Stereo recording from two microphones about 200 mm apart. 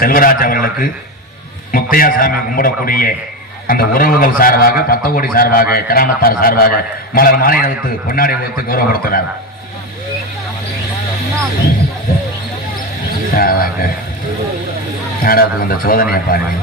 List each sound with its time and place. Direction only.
0.0 s a man's voice: 45° left (ahead or behind)
13.3 s a man's voice: 45° left (ahead or behind)
15.2 s a man's voice: 45° left (ahead or behind)